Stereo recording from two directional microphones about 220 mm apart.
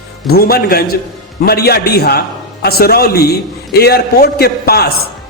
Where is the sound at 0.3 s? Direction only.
45° left (ahead or behind).